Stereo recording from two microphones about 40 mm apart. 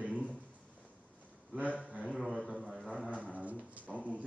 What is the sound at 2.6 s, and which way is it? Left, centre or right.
Speech, centre.